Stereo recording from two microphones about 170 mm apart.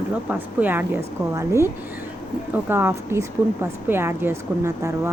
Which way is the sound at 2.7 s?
15° right (ahead or behind).